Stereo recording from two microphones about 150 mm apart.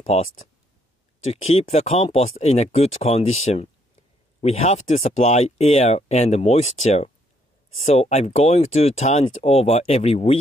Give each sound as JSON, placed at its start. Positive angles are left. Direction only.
{"t": 0.0, "sound": "speech", "side_deg": 45}